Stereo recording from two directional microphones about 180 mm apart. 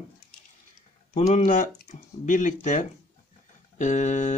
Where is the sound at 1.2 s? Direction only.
40° left (ahead or behind).